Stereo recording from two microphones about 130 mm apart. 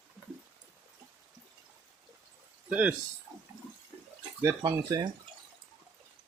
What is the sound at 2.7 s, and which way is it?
Speech, 10° right (ahead or behind).